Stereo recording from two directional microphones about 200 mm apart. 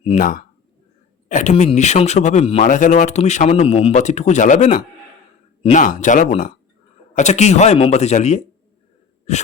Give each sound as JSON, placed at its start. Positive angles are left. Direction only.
{"t": 0.0, "sound": "speech", "side_deg": 35}